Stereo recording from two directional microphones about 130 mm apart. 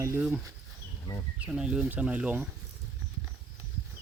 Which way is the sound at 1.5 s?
5° right (ahead or behind).